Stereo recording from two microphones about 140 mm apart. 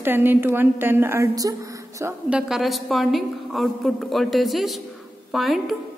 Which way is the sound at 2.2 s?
5° right (ahead or behind).